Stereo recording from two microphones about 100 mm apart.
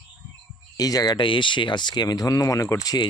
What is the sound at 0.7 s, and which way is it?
Speech, 40° left (ahead or behind).